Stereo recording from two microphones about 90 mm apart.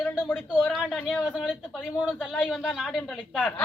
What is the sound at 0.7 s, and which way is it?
Speech, centre (ahead or behind).